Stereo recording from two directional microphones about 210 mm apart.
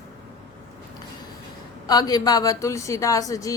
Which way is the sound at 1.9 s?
20° left (ahead or behind).